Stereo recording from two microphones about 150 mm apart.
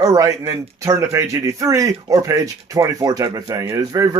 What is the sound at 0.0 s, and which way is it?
Speech, 25° right (ahead or behind).